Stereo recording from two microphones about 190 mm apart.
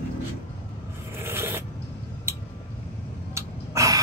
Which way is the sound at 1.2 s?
10° right (ahead or behind).